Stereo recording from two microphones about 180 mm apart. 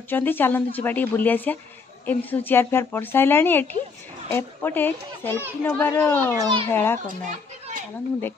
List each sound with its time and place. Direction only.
0.1 s speech: 10° left (ahead or behind)
6.3 s a child's voice: 25° right (ahead or behind)
6.7 s speech: 10° left (ahead or behind)